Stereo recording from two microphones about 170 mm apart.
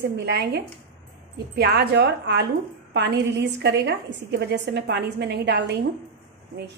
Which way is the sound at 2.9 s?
90° right.